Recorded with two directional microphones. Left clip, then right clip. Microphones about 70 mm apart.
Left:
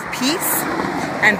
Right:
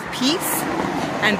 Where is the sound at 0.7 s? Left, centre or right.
Left.